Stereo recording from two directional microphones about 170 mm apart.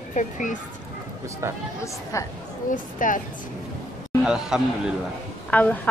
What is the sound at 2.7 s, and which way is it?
Speech, 50° left (ahead or behind).